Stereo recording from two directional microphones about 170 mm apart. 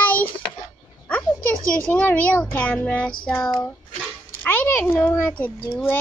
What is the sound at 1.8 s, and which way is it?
A child's voice, 10° left (ahead or behind).